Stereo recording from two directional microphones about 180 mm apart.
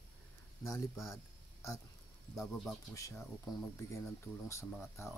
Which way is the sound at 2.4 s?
Centre (ahead or behind).